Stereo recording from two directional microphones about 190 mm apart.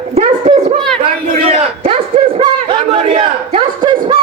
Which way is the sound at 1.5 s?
30° right (ahead or behind).